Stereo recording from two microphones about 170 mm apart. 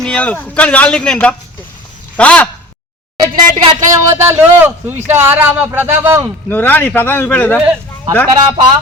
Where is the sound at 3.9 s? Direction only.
15° right (ahead or behind).